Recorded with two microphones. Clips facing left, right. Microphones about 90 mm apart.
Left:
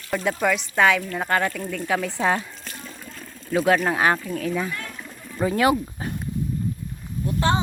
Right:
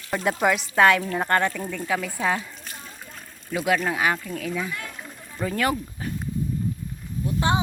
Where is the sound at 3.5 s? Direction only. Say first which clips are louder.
Left 4 dB; 30° left (ahead or behind).